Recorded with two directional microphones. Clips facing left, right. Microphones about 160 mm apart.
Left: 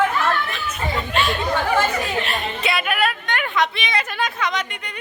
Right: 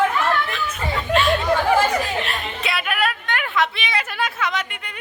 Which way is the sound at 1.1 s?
Centre (ahead or behind).